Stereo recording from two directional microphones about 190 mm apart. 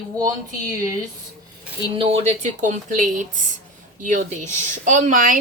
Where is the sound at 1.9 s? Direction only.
30° right (ahead or behind).